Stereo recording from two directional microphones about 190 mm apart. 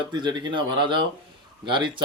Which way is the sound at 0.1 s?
25° right (ahead or behind).